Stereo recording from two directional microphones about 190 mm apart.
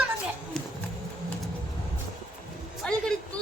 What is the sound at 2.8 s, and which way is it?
Female singing, 5° left (ahead or behind).